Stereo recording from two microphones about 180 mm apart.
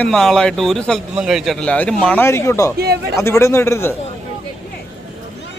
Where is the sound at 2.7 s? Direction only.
60° right (ahead or behind).